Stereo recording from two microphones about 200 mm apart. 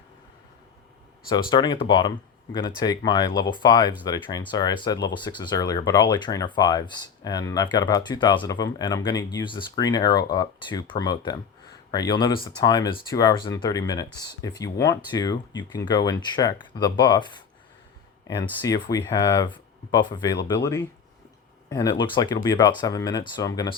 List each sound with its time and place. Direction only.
1.3 s speech: 20° left (ahead or behind)